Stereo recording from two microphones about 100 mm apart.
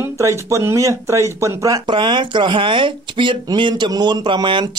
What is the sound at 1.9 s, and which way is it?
Speech, 55° right (ahead or behind).